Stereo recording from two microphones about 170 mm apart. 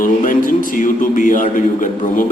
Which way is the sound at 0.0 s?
55° left (ahead or behind).